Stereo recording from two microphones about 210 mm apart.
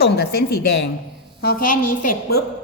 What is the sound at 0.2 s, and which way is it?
A woman's voice, 50° left (ahead or behind).